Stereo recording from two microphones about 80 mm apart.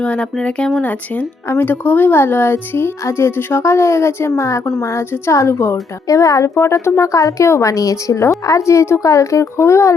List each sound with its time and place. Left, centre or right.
0.0 s a woman's voice: centre; by 9.9 s left